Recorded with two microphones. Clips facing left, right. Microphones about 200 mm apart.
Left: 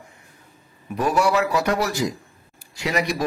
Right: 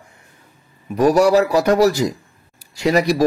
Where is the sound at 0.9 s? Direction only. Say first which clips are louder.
Right 7 dB; 40° right (ahead or behind).